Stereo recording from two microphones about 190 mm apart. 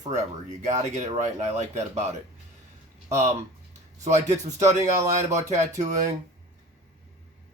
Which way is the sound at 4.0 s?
35° right (ahead or behind).